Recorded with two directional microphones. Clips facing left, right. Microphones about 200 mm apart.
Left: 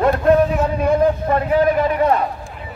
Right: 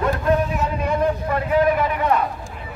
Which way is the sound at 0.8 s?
35° left (ahead or behind).